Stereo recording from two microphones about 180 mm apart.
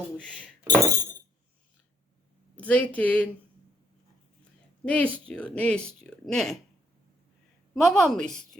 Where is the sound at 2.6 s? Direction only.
10° left (ahead or behind).